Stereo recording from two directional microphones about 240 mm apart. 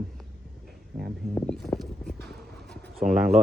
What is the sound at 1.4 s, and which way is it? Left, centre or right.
Speech, centre.